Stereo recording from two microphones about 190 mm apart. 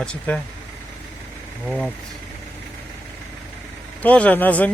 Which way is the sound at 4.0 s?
10° left (ahead or behind).